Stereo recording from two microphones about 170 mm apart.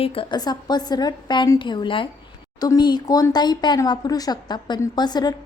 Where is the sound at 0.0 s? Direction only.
35° left (ahead or behind).